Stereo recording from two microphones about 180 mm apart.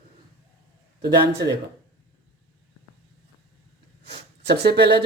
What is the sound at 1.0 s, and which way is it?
Speech, 65° right (ahead or behind).